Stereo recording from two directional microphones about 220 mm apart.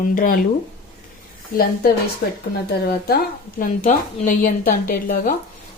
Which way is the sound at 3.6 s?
35° left (ahead or behind).